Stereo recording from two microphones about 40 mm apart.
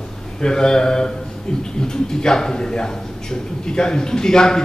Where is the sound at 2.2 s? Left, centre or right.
Centre.